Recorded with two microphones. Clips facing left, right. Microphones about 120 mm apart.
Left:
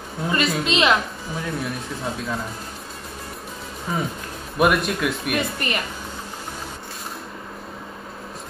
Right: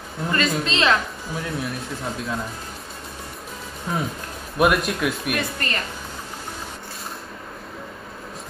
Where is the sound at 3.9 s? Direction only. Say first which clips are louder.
Even; centre (ahead or behind).